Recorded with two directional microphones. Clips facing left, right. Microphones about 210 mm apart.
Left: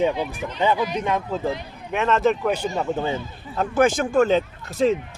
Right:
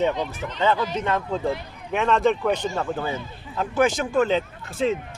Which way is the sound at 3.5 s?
45° left (ahead or behind).